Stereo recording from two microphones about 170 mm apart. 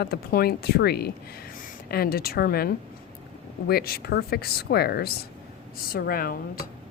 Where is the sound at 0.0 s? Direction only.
65° left (ahead or behind).